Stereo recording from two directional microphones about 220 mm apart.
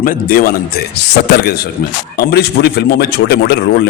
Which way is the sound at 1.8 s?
45° left (ahead or behind).